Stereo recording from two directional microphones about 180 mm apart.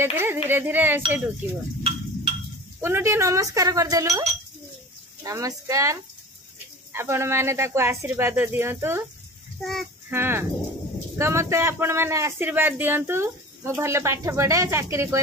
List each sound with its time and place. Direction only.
0.0 s speech: 15° right (ahead or behind)
1.8 s a sound: 30° right (ahead or behind)
2.8 s speech: 15° right (ahead or behind)
4.1 s speech: 35° right (ahead or behind)
5.2 s speech: 20° right (ahead or behind)
9.6 s child singing: centre (ahead or behind)
10.0 s speech: 10° right (ahead or behind)